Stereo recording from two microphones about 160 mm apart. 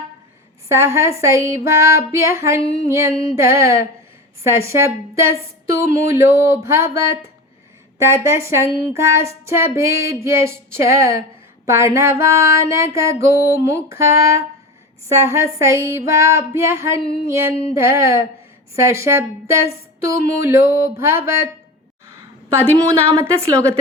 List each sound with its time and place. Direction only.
0.7 s a woman's voice: 15° right (ahead or behind)
22.5 s a woman's voice: 15° right (ahead or behind)